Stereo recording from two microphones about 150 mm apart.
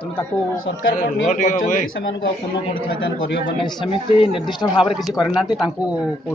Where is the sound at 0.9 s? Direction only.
55° left (ahead or behind).